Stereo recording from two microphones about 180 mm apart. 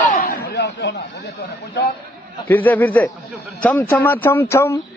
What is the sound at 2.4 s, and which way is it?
Speech, 10° left (ahead or behind).